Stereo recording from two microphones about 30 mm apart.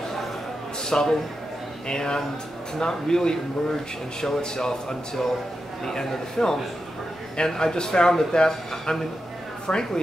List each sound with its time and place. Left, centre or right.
0.8 s a man's voice: left